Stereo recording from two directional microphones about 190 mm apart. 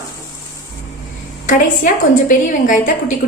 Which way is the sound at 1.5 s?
45° left (ahead or behind).